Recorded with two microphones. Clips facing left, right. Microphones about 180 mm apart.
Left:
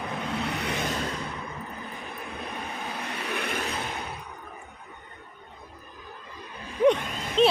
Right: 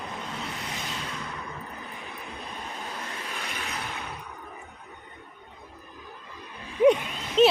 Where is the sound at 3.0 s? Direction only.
70° left (ahead or behind).